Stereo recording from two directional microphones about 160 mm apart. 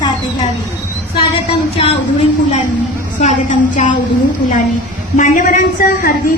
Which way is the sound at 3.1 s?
50° left (ahead or behind).